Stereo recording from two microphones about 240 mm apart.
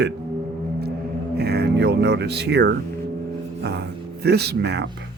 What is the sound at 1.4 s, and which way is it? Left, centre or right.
Speech, right.